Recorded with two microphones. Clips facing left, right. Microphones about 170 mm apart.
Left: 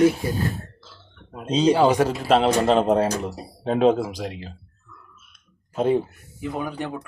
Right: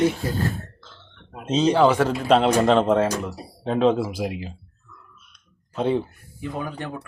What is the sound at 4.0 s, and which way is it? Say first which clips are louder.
Speech: right 2 dB; 5° right (ahead or behind).